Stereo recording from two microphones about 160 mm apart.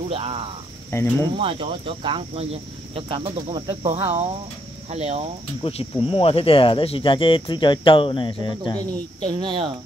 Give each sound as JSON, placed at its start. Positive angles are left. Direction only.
{"t": 0.1, "sound": "speech", "side_deg": -35}
{"t": 0.9, "sound": "cricket", "side_deg": 15}
{"t": 1.4, "sound": "speech", "side_deg": -35}
{"t": 5.6, "sound": "speech", "side_deg": 40}
{"t": 9.3, "sound": "speech", "side_deg": -30}